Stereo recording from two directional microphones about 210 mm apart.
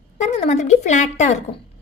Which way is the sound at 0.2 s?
35° left (ahead or behind).